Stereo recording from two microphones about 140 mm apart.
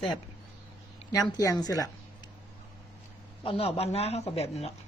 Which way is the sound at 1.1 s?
25° left (ahead or behind).